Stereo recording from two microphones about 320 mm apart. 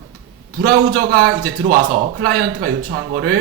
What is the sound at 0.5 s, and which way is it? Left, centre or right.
A man's voice, right.